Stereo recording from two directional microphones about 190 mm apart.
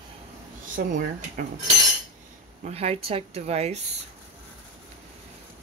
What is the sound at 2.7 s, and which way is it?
Speech, 30° right (ahead or behind).